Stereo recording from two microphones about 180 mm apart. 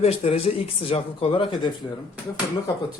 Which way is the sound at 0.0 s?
35° left (ahead or behind).